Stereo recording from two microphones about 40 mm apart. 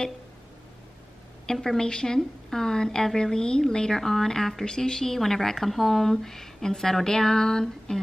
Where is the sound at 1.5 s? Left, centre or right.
Centre.